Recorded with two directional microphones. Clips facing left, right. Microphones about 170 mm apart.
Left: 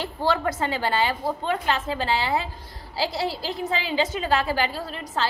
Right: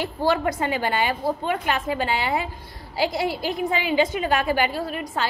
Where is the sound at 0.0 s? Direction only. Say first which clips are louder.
Right 2 dB; 10° right (ahead or behind).